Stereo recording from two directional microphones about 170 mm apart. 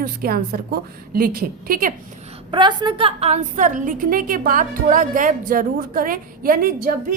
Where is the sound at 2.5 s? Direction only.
25° right (ahead or behind).